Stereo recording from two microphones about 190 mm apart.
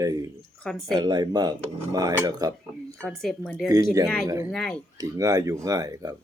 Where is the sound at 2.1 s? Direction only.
20° right (ahead or behind).